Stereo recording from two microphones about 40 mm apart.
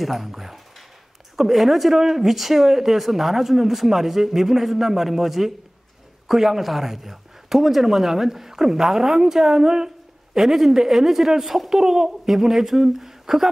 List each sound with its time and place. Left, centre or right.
0.0 s speech: centre